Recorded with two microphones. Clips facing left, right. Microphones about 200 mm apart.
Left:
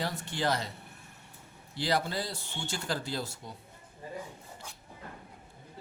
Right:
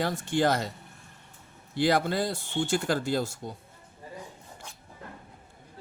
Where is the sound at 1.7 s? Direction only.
50° right (ahead or behind).